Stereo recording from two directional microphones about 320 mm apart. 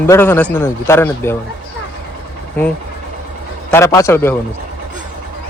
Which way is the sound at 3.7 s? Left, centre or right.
Centre.